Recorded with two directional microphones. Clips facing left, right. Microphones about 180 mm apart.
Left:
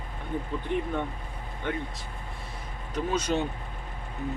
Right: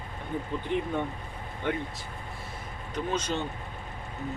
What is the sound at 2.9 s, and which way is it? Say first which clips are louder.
Speech: left 2 dB; 10° left (ahead or behind).